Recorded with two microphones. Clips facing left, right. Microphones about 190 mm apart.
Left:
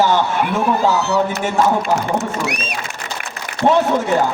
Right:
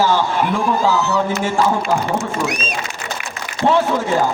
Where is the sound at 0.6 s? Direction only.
65° left (ahead or behind).